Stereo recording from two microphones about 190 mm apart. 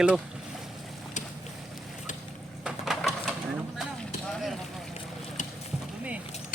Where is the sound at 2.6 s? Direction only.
Centre (ahead or behind).